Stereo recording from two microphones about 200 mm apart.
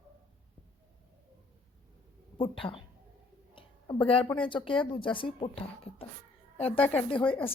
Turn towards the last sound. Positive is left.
turn(degrees=25)  # may be behind; listen again after turning